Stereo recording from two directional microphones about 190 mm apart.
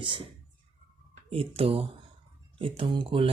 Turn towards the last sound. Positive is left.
turn(degrees=-25)  # may be behind; listen again after turning